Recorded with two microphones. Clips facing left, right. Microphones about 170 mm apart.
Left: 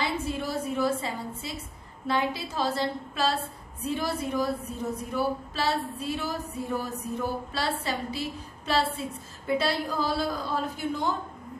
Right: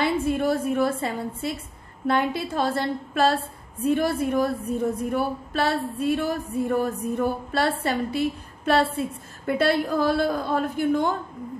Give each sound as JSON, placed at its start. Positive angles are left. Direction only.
{"t": 0.0, "sound": "a woman's voice", "side_deg": -55}